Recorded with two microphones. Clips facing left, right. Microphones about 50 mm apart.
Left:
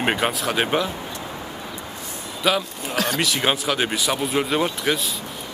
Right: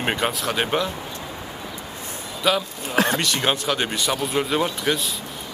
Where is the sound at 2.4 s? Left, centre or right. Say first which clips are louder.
Even; centre.